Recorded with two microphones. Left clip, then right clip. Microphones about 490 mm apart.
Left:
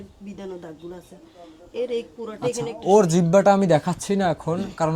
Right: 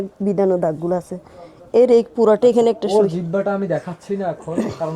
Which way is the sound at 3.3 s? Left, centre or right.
Left.